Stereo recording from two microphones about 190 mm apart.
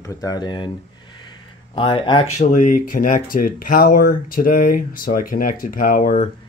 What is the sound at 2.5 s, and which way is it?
Speech, 45° left (ahead or behind).